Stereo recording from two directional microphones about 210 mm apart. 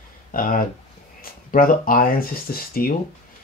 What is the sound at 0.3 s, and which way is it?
Speech, 40° left (ahead or behind).